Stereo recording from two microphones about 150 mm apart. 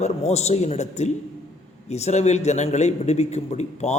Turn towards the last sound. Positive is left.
turn(degrees=50)  # may be behind; listen again after turning